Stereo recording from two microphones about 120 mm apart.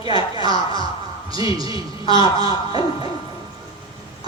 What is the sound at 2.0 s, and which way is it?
Speech, 45° left (ahead or behind).